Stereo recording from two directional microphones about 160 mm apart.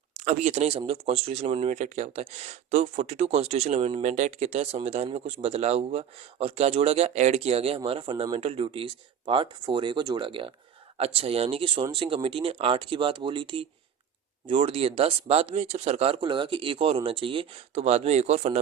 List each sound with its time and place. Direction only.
0.3 s a man's voice: 45° right (ahead or behind)